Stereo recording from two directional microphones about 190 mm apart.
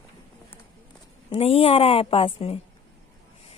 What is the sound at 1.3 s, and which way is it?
A woman's voice, 30° left (ahead or behind).